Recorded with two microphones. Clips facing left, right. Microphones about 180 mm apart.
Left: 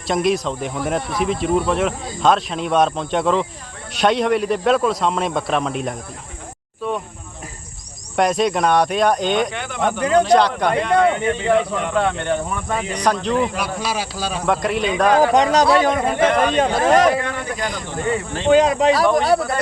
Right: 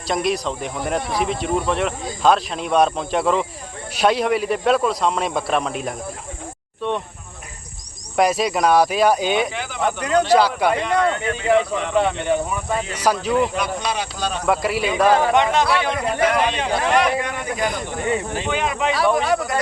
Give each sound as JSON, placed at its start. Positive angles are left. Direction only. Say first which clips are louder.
{"t": 0.1, "sound": "speech", "louder": "left 3 dB", "side_deg": 0}
{"t": 8.1, "sound": "speech", "louder": "left 1 dB", "side_deg": 0}
{"t": 10.9, "sound": "speech", "louder": "left 3 dB", "side_deg": 20}
{"t": 11.4, "sound": "speech", "louder": "right 2 dB", "side_deg": 0}
{"t": 15.2, "sound": "speech", "louder": "left 3 dB", "side_deg": 35}
{"t": 15.8, "sound": "speech", "louder": "left 3 dB", "side_deg": 50}
{"t": 17.2, "sound": "speech", "louder": "even", "side_deg": -15}
{"t": 18.4, "sound": "speech", "louder": "left 12 dB", "side_deg": 35}